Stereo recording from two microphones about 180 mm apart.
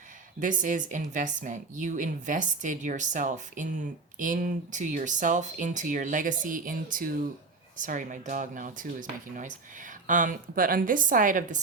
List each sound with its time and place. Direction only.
0.3 s speech: 45° right (ahead or behind)